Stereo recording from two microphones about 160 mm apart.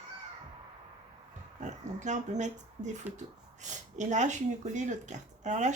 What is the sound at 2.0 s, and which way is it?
Speech, 50° right (ahead or behind).